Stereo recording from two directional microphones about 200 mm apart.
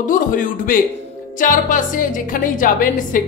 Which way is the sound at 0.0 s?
40° left (ahead or behind).